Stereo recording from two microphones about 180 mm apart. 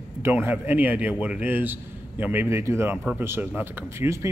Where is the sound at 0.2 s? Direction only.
10° right (ahead or behind).